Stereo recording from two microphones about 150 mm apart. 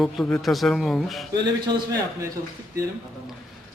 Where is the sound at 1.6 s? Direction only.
30° right (ahead or behind).